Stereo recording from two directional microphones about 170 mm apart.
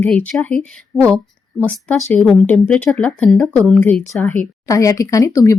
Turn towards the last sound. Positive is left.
turn(degrees=20)  # may be behind; listen again after turning